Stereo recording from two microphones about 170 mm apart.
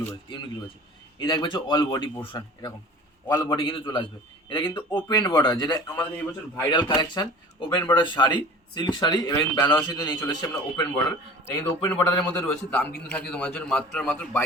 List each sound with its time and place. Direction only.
0.1 s a man's voice: 25° left (ahead or behind); by 14.4 s 5° left (ahead or behind)